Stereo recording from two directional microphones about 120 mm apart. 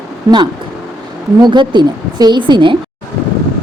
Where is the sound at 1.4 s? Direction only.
40° right (ahead or behind).